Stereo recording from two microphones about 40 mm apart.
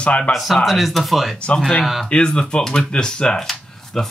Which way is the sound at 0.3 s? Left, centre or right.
Left.